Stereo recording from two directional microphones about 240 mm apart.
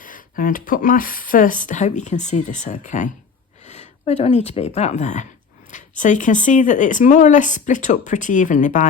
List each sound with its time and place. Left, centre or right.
0.0 s speech: left